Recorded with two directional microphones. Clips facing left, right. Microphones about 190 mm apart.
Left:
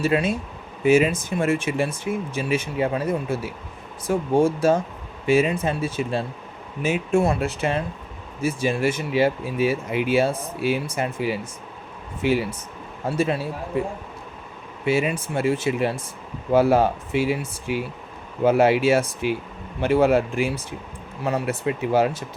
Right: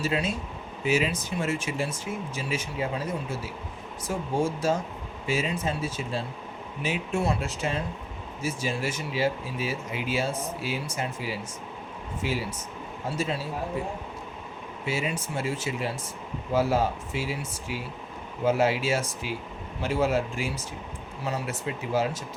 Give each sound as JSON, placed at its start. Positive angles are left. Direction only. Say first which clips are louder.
{"t": 0.0, "sound": "speech", "louder": "left 7 dB", "side_deg": 60}
{"t": 6.8, "sound": "speech", "louder": "left 7 dB", "side_deg": 50}